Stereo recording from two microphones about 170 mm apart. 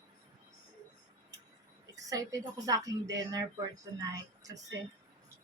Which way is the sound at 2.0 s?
20° right (ahead or behind).